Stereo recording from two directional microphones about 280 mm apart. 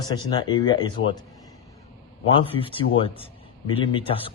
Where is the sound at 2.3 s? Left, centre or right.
Centre.